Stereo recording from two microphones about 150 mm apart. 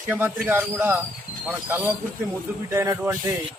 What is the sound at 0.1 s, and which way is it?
A man's voice, 10° right (ahead or behind).